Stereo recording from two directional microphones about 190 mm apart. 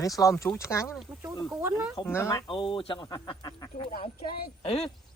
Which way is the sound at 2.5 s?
25° left (ahead or behind).